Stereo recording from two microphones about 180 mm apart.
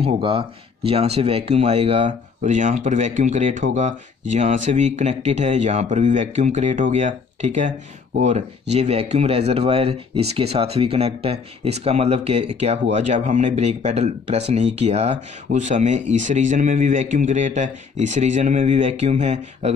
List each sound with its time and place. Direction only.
0.0 s speech: 30° right (ahead or behind)